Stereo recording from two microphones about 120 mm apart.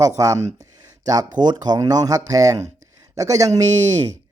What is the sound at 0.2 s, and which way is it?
Speech, 25° right (ahead or behind).